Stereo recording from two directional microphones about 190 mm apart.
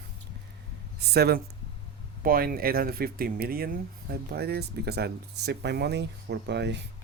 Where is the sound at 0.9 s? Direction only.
60° right (ahead or behind).